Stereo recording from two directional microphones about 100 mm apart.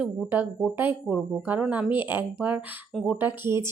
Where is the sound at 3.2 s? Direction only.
20° right (ahead or behind).